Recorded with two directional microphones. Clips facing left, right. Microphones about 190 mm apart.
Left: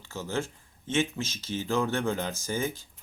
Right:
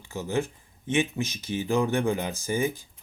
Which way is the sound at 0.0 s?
15° right (ahead or behind).